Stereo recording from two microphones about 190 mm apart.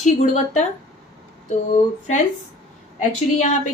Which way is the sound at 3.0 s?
40° left (ahead or behind).